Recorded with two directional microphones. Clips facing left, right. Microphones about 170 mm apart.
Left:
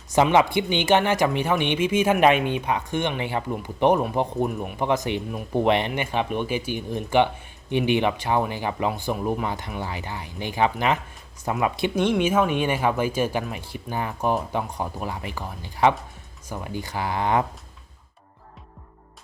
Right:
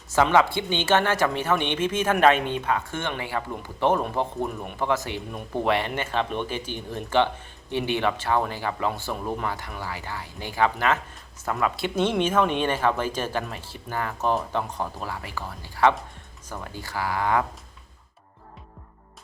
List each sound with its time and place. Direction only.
0.1 s speech: 20° left (ahead or behind)